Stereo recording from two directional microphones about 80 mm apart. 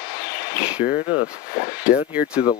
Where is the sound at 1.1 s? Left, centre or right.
Centre.